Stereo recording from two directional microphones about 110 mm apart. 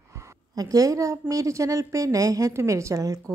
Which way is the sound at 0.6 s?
35° right (ahead or behind).